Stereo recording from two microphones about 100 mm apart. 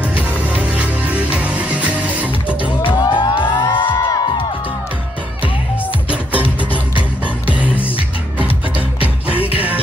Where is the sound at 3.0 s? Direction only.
45° left (ahead or behind).